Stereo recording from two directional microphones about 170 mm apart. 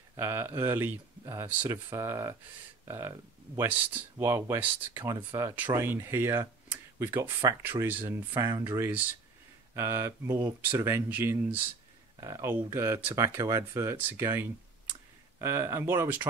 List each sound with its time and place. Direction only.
0.1 s speech: 15° right (ahead or behind)